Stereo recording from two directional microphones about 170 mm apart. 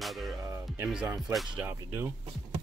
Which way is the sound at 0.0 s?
Centre (ahead or behind).